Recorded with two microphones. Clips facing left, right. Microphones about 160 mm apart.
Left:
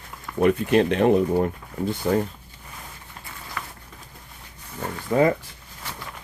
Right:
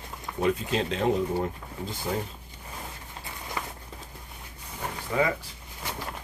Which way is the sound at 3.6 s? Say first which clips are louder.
Right 1 dB; 20° right (ahead or behind).